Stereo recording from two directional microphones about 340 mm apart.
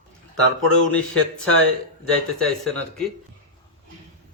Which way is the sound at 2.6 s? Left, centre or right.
Centre.